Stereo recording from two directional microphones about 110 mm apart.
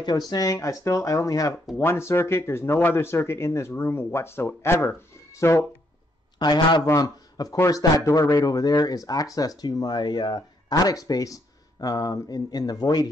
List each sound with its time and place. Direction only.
0.3 s a man's voice: 30° left (ahead or behind)
6.3 s a man's voice: 40° left (ahead or behind)